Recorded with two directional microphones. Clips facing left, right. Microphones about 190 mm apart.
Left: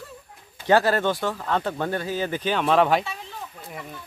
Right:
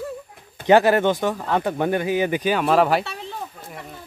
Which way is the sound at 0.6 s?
15° right (ahead or behind).